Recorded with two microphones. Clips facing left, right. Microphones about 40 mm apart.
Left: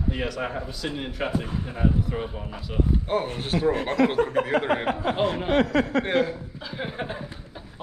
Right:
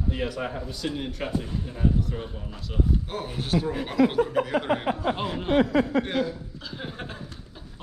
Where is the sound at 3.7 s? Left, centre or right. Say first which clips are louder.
Left 1 dB; centre.